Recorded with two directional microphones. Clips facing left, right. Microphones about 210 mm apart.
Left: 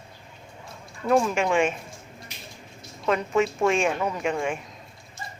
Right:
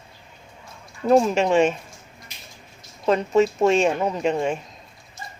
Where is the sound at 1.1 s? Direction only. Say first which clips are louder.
Right 4 dB; 30° right (ahead or behind).